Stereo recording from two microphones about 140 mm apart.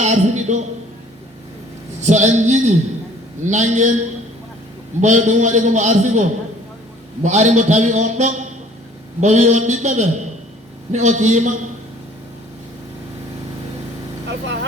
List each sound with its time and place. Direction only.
0.0 s a man's voice: 55° right (ahead or behind)
2.0 s a man's voice: 55° right (ahead or behind)